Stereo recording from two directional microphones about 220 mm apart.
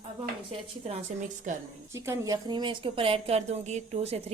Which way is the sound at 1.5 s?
35° right (ahead or behind).